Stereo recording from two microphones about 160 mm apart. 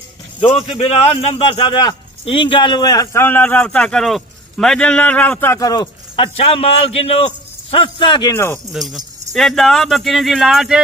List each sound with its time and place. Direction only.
0.4 s a man's voice: 40° left (ahead or behind); by 5.9 s 20° left (ahead or behind)
6.1 s a man's voice: 35° left (ahead or behind)
8.3 s speech: 15° left (ahead or behind)
8.7 s speech: centre (ahead or behind)